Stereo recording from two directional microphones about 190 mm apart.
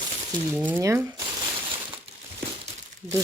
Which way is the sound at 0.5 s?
10° right (ahead or behind).